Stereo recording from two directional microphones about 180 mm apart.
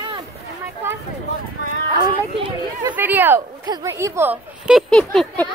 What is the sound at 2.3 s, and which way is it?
Speech, 30° right (ahead or behind).